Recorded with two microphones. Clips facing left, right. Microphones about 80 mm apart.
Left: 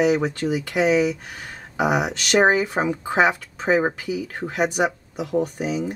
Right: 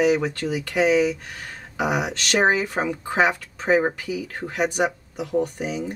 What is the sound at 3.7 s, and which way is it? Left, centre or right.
Speech, centre.